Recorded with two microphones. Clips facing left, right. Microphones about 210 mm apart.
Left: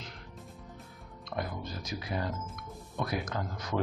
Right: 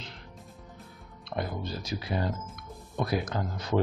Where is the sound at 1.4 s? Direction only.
30° right (ahead or behind).